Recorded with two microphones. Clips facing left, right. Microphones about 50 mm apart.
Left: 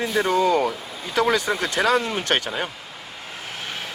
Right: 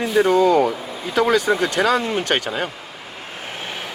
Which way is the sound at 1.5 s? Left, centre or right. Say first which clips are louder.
Right 3 dB; centre.